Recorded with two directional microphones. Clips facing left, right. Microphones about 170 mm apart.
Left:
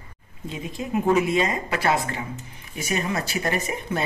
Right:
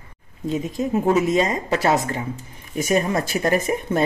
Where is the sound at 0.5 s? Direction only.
40° right (ahead or behind).